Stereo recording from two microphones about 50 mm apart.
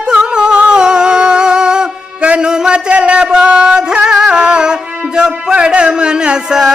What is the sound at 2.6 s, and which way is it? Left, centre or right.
Speech, right.